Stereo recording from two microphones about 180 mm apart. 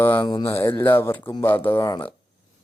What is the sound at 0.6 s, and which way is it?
Speech, 10° left (ahead or behind).